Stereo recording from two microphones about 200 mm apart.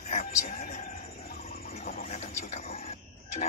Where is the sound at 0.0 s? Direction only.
40° left (ahead or behind).